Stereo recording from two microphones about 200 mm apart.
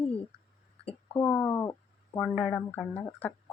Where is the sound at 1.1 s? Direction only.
15° left (ahead or behind).